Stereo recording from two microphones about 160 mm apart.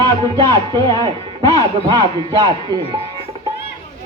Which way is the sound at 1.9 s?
25° right (ahead or behind).